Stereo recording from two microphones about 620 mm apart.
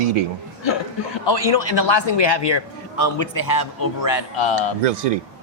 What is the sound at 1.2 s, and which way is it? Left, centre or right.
A man's voice, left.